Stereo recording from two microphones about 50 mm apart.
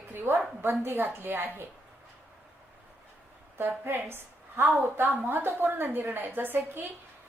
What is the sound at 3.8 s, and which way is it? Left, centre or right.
A woman's voice, right.